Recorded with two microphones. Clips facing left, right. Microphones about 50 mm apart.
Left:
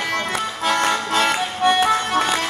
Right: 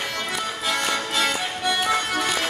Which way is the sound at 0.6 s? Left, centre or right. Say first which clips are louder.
Left 6 dB; left.